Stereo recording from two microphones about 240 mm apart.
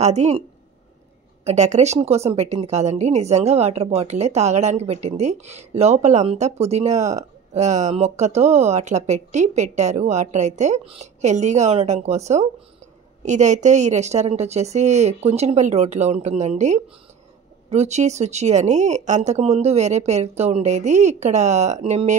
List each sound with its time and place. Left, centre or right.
0.0 s speech: right
1.4 s speech: right